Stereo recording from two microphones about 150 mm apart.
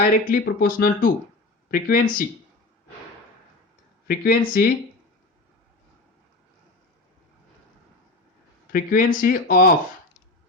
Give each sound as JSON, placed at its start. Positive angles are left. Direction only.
{"t": 0.1, "sound": "speech", "side_deg": 70}
{"t": 4.0, "sound": "speech", "side_deg": 90}
{"t": 8.7, "sound": "speech", "side_deg": 65}